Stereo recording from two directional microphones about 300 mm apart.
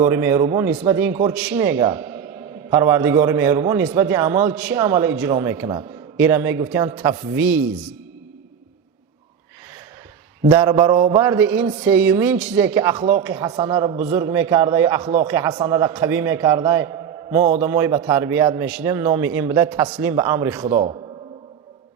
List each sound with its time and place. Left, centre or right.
0.0 s a man's voice: centre
10.4 s a man's voice: centre